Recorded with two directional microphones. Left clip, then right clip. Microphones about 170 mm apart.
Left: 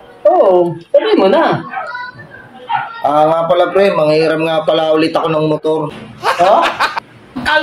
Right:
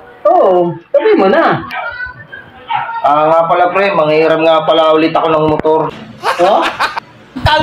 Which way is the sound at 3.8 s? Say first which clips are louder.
Right 1 dB; 55° left (ahead or behind).